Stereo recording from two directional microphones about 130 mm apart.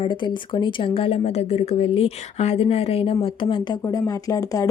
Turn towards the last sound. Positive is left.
turn(degrees=25)  # may be behind; listen again after turning